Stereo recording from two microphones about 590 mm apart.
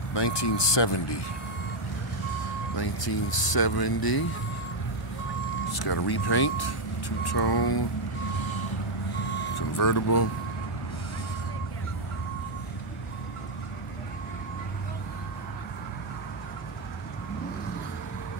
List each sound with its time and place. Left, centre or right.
0.1 s speech: left
2.8 s speech: left
5.7 s speech: left
9.6 s speech: left